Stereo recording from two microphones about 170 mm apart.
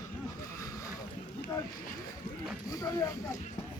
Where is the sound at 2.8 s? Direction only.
20° left (ahead or behind).